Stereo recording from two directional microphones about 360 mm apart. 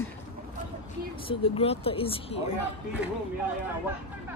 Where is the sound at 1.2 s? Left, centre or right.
Centre.